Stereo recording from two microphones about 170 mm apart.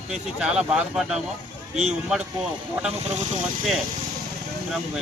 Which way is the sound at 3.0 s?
40° right (ahead or behind).